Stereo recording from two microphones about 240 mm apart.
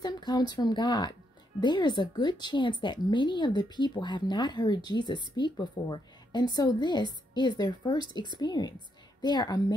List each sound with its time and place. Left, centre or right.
0.0 s a woman's voice: centre